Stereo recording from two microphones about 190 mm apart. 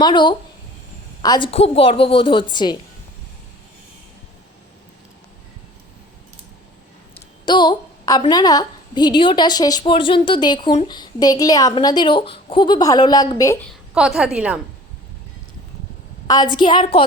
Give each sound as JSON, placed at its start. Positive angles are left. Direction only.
{"t": 0.0, "sound": "a woman's voice", "side_deg": 25}
{"t": 7.4, "sound": "a woman's voice", "side_deg": 25}
{"t": 13.9, "sound": "a woman's voice", "side_deg": -5}
{"t": 16.2, "sound": "a woman's voice", "side_deg": 20}